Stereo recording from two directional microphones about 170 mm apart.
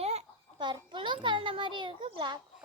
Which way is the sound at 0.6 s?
25° right (ahead or behind).